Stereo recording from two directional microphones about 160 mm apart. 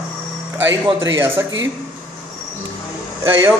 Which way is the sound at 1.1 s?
15° right (ahead or behind).